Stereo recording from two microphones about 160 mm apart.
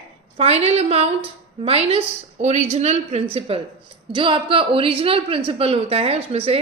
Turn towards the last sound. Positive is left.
turn(degrees=-40)  # may be behind; listen again after turning